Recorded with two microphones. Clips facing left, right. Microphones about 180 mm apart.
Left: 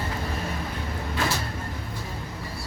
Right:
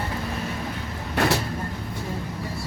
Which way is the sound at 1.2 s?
70° right (ahead or behind).